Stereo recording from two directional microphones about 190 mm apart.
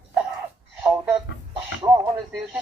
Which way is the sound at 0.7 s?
5° right (ahead or behind).